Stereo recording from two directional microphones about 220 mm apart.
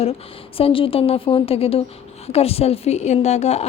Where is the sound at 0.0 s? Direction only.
25° left (ahead or behind).